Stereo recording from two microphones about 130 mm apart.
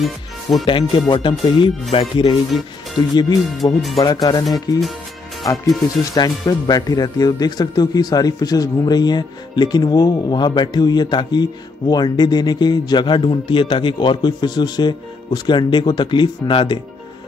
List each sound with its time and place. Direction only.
0.0 s speech: centre (ahead or behind)
0.7 s speech: 35° left (ahead or behind)
3.0 s speech: 35° left (ahead or behind)